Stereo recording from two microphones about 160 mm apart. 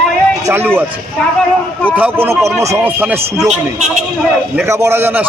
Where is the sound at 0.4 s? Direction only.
15° right (ahead or behind).